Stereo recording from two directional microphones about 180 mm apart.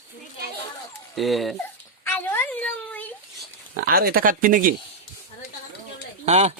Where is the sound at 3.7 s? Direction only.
55° right (ahead or behind).